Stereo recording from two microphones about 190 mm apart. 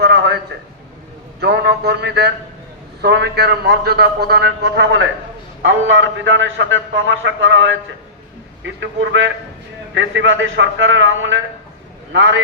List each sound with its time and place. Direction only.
0.0 s a sound: 60° right (ahead or behind)
1.4 s a man's voice: 60° right (ahead or behind)
5.6 s a man's voice: 80° right